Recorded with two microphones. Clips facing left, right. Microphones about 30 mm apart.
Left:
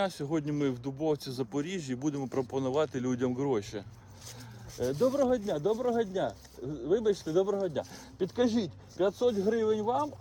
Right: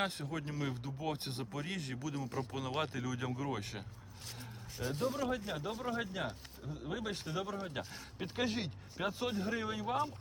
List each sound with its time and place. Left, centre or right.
0.2 s speech: right
0.6 s speech: centre
1.5 s speech: right
3.7 s speech: centre
4.8 s speech: centre
5.2 s speech: right
6.6 s speech: centre; by 9.8 s right